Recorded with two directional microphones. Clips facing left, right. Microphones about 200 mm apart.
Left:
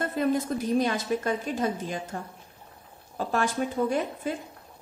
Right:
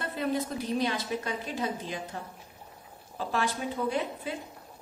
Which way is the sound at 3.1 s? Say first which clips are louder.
Left 4 dB; 45° left (ahead or behind).